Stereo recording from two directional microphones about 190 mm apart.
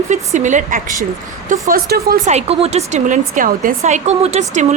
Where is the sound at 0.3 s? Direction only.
40° right (ahead or behind).